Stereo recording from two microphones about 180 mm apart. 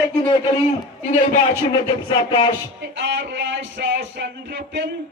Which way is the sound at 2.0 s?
25° left (ahead or behind).